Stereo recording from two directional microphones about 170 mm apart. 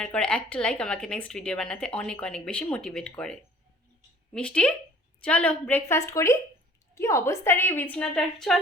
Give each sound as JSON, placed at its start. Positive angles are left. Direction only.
{"t": 0.0, "sound": "a woman's voice", "side_deg": 5}